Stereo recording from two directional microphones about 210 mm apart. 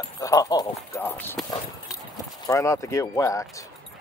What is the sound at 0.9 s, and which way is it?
Clip-clop, 10° left (ahead or behind).